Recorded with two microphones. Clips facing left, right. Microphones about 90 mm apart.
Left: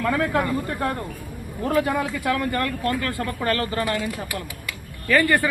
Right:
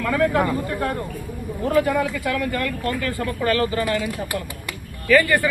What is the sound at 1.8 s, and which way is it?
Speech, 20° left (ahead or behind).